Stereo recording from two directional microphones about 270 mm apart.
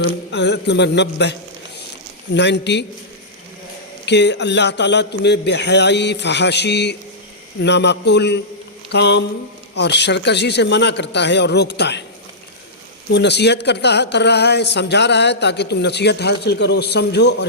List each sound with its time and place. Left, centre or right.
0.0 s speech: left
4.0 s speech: left
13.1 s speech: left